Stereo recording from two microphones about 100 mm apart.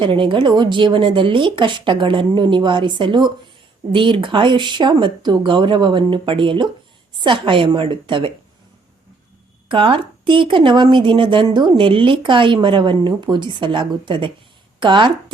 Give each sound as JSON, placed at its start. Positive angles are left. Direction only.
{"t": 0.0, "sound": "a woman's voice", "side_deg": -55}
{"t": 9.6, "sound": "a woman's voice", "side_deg": -60}